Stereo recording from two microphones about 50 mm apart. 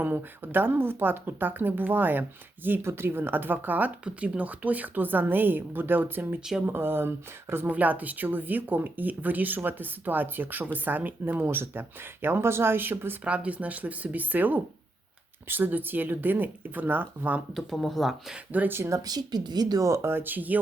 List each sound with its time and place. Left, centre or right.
0.0 s speech: right
2.8 s speech: right
7.7 s speech: right
13.2 s speech: right
17.5 s speech: centre
18.9 s speech: right
20.1 s speech: right